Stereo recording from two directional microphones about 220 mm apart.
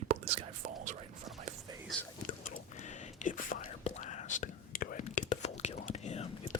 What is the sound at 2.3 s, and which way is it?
Whispering, 35° left (ahead or behind).